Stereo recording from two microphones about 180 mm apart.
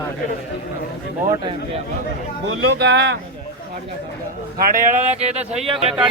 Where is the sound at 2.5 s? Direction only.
80° right.